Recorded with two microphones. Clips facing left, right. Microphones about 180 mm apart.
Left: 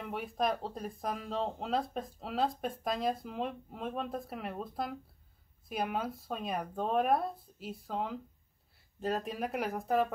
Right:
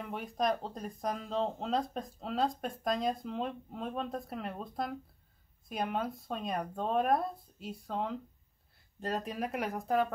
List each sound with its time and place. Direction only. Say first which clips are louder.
0.0 s speech: even; 5° left (ahead or behind)